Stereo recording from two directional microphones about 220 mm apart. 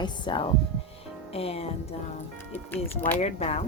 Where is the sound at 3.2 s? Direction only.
30° left (ahead or behind).